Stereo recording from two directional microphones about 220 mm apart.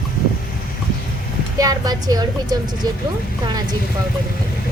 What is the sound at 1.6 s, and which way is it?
Speech, 15° right (ahead or behind).